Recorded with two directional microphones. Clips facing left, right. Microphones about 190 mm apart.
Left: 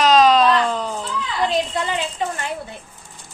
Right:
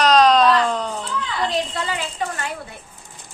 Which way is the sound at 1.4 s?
20° left (ahead or behind).